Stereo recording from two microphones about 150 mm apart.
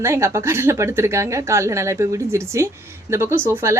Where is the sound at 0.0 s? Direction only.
20° right (ahead or behind).